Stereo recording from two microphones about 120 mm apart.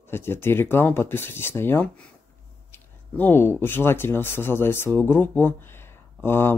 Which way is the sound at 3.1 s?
15° left (ahead or behind).